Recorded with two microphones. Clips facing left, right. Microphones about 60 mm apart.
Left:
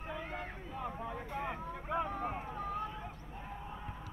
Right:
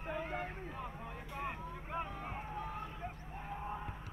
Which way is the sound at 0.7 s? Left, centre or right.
Left.